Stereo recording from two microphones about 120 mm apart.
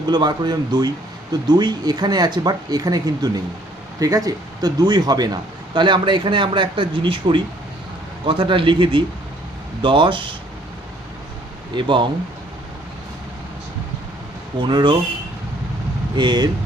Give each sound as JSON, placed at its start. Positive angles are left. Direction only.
{"t": 0.1, "sound": "a man's voice", "side_deg": -35}
{"t": 11.7, "sound": "speech", "side_deg": -40}
{"t": 14.6, "sound": "a man's voice", "side_deg": -40}
{"t": 16.1, "sound": "a man's voice", "side_deg": -40}